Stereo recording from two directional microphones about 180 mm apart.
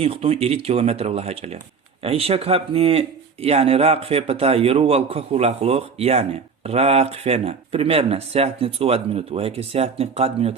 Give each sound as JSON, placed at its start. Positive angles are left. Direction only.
{"t": 0.0, "sound": "speech", "side_deg": -35}